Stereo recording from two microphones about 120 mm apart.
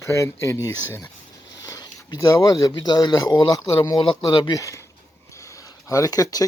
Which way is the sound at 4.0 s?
45° left (ahead or behind).